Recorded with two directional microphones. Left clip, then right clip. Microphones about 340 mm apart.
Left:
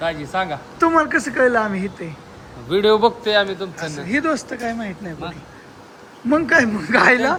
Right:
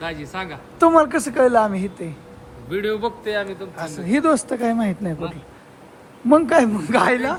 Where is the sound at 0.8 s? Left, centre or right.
Centre.